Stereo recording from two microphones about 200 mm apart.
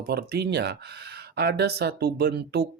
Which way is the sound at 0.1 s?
55° right (ahead or behind).